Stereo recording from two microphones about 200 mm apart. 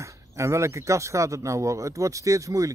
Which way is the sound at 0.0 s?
15° right (ahead or behind).